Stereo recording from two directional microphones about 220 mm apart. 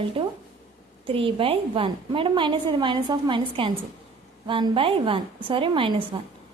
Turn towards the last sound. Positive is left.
turn(degrees=-20)  # may be behind; listen again after turning